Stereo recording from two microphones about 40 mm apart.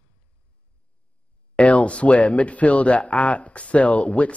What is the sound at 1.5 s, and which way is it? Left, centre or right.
Speech, left.